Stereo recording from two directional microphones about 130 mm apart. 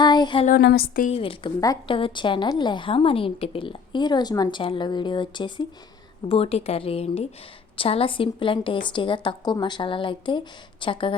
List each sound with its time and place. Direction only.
0.0 s a sound: 35° left (ahead or behind)
0.4 s speech: 85° left
1.1 s a woman's voice: 45° left (ahead or behind)
6.2 s a woman's voice: 50° left (ahead or behind)